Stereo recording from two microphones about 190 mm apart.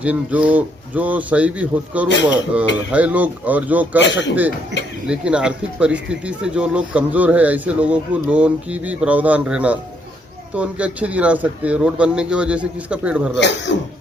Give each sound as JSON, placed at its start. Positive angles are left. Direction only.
{"t": 0.0, "sound": "speech", "side_deg": -5}
{"t": 4.0, "sound": "speech", "side_deg": 70}
{"t": 5.0, "sound": "a man's voice", "side_deg": -5}
{"t": 13.4, "sound": "speech", "side_deg": 70}